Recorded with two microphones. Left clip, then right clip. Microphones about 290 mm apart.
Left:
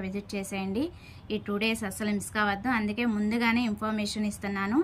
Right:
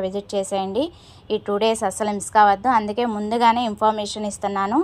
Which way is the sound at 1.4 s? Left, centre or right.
Right.